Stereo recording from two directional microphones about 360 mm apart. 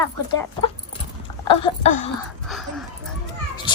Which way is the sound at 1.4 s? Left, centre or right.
Centre.